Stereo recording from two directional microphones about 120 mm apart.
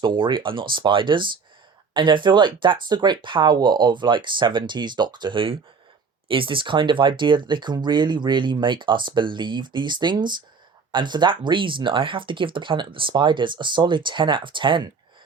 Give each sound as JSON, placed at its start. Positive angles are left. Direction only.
{"t": 0.0, "sound": "speech", "side_deg": -40}